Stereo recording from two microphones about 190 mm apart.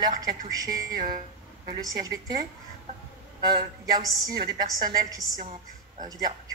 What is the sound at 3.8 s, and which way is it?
A woman's voice, 20° right (ahead or behind).